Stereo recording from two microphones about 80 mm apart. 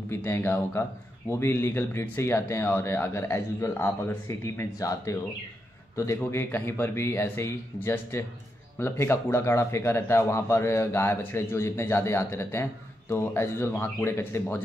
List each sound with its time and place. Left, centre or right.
0.1 s speech: left
6.1 s speech: left